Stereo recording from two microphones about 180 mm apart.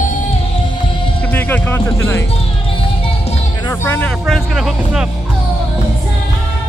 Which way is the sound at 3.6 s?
15° left (ahead or behind).